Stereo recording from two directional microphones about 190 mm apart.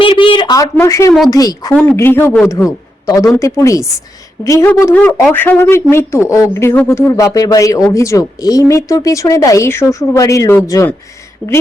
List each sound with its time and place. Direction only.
0.0 s speech: 25° left (ahead or behind)
1.7 s speech: 5° left (ahead or behind)